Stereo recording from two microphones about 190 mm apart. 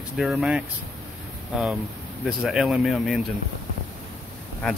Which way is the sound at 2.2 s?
5° right (ahead or behind).